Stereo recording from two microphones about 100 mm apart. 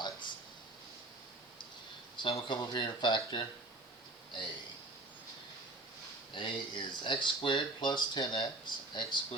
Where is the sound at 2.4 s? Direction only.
50° left (ahead or behind).